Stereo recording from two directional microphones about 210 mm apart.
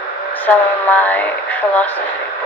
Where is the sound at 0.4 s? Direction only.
10° left (ahead or behind).